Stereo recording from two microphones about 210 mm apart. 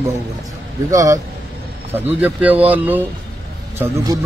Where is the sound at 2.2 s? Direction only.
5° right (ahead or behind).